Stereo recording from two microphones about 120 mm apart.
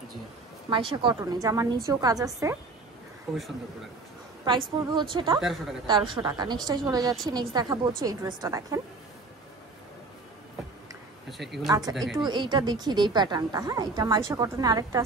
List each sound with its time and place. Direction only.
0.7 s a woman's voice: 45° right (ahead or behind)
1.2 s a woman's voice: 30° right (ahead or behind)
3.3 s a woman's voice: centre (ahead or behind)
4.5 s a woman's voice: 40° right (ahead or behind)
11.2 s a woman's voice: centre (ahead or behind)
12.2 s a woman's voice: 40° right (ahead or behind)